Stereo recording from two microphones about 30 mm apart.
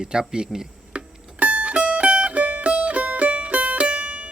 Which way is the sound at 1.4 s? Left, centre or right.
Right.